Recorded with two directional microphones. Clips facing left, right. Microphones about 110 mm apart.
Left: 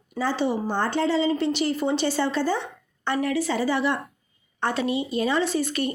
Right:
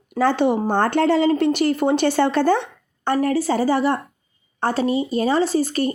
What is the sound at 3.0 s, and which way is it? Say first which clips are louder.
Speech: right 5 dB; 45° right (ahead or behind).